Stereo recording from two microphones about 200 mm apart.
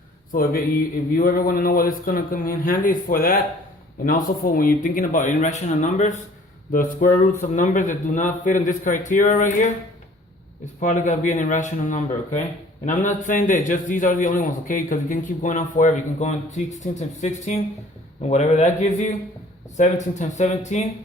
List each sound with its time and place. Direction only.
0.3 s a man's voice: 45° left (ahead or behind)
10.8 s a man's voice: 40° left (ahead or behind)